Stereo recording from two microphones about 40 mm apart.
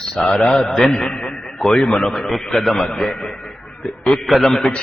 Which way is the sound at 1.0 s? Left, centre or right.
Left.